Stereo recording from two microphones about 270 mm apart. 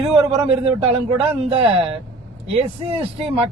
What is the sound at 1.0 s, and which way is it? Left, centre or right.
Speech, centre.